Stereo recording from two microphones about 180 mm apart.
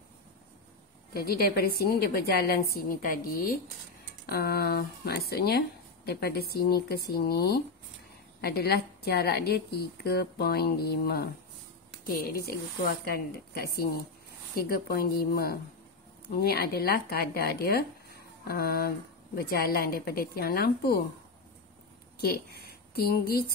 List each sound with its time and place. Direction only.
1.1 s a woman's voice: 60° left (ahead or behind)
22.2 s speech: 60° left (ahead or behind)